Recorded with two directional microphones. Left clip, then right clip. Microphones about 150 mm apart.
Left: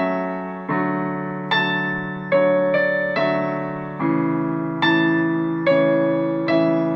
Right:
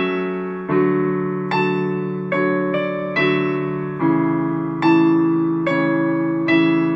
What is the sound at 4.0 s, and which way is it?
Music, 30° left (ahead or behind).